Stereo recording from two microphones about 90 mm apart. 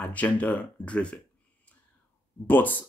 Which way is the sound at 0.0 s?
15° left (ahead or behind).